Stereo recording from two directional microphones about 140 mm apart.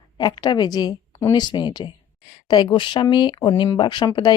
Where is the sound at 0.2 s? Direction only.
30° left (ahead or behind).